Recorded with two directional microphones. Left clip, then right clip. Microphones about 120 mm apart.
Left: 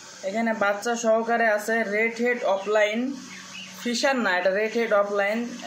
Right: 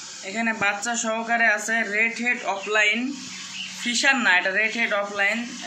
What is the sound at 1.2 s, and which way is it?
A man's voice, 20° left (ahead or behind).